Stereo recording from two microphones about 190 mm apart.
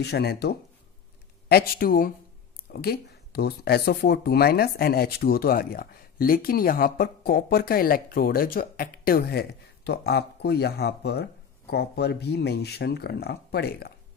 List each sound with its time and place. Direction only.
0.0 s speech: 60° left (ahead or behind)